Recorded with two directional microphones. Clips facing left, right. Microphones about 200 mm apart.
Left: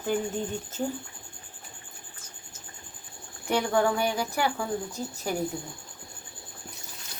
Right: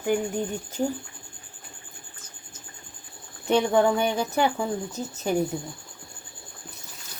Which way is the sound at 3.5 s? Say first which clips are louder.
Right 4 dB; 20° right (ahead or behind).